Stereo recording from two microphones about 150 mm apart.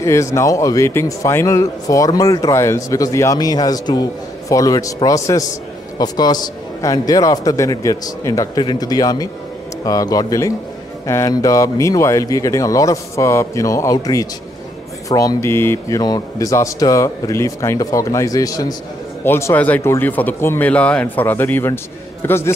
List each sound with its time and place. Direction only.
0.0 s a man's voice: 20° left (ahead or behind)